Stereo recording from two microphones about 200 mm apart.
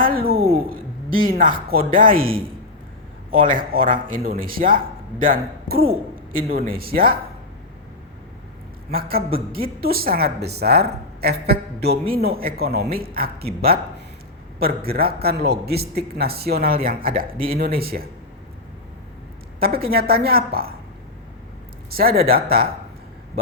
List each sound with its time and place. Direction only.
0.0 s a sound: 45° right (ahead or behind)
0.7 s speech: 45° right (ahead or behind)
3.4 s a man's voice: 45° right (ahead or behind)
8.9 s a man's voice: 50° right (ahead or behind)
19.5 s a man's voice: 50° right (ahead or behind)
22.2 s a man's voice: 50° right (ahead or behind)